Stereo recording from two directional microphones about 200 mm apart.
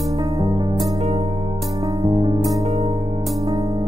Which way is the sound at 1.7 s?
20° right (ahead or behind).